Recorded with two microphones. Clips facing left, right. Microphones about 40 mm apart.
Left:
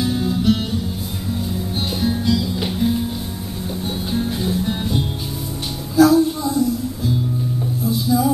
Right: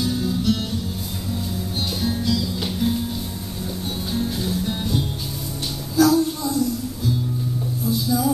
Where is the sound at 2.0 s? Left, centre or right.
Centre.